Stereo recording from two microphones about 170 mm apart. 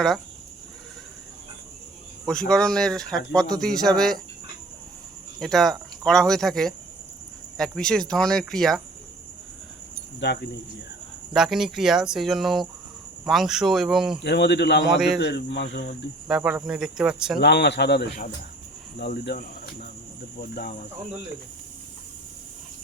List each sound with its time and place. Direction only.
2.5 s speech: 5° left (ahead or behind)
5.4 s speech: centre (ahead or behind)
10.2 s speech: 80° left
11.3 s speech: centre (ahead or behind)
14.2 s a man's voice: 90° left
16.3 s speech: 5° right (ahead or behind)
17.4 s speech: 80° left
20.4 s cricket: 60° left (ahead or behind)